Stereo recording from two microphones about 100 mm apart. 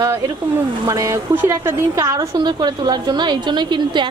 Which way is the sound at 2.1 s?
45° right (ahead or behind).